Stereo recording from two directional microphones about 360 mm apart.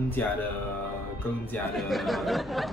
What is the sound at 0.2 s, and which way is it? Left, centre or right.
Speech, centre.